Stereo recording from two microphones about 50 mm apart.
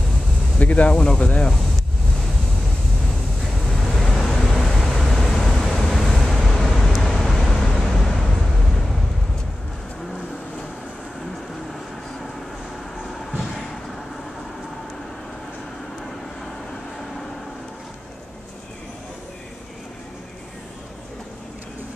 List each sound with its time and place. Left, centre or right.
0.6 s speech: left
3.7 s vehicle: centre